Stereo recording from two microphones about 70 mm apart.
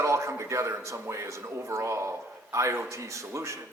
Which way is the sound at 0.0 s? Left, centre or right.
Right.